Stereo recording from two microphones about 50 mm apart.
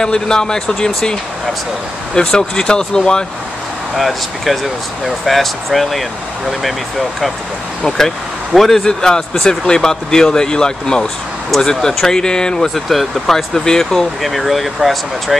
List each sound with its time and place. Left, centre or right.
0.0 s a man's voice: centre
2.1 s a man's voice: centre
3.9 s speech: centre
8.5 s a man's voice: centre
14.2 s speech: centre